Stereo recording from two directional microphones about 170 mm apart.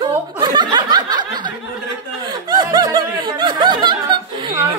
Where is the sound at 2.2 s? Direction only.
25° right (ahead or behind).